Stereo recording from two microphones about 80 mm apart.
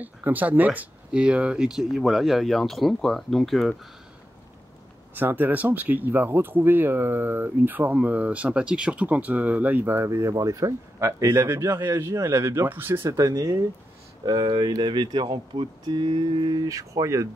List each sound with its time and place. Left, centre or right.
0.0 s speech: right; by 3.7 s centre
5.1 s speech: right
10.0 s speech: right
13.1 s speech: right
14.2 s speech: right
16.6 s speech: right